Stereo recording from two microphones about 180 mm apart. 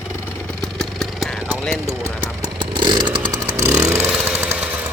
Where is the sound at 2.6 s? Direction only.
25° right (ahead or behind).